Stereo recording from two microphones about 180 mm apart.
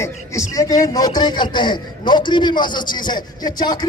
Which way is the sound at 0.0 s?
15° left (ahead or behind).